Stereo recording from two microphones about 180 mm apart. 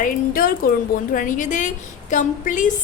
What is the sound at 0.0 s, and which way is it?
A woman's voice, 50° left (ahead or behind).